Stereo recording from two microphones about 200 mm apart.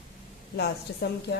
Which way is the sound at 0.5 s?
55° left (ahead or behind).